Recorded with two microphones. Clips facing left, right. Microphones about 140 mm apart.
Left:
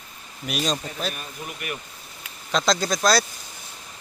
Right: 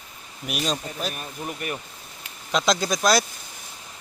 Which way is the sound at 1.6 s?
35° right (ahead or behind).